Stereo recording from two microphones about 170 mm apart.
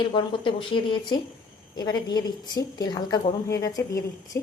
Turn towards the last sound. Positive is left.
turn(degrees=20)  # may be behind; listen again after turning